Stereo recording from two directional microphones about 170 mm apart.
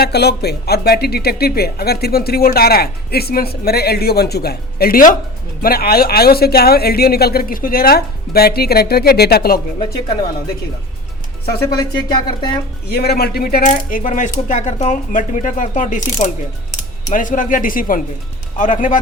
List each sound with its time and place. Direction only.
0.0 s speech: 70° left (ahead or behind)
11.6 s speech: 25° left (ahead or behind)
12.9 s speech: 70° left (ahead or behind)
13.7 s speech: 50° left (ahead or behind)